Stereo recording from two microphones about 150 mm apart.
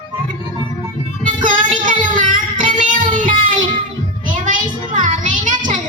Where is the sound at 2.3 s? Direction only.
60° right (ahead or behind).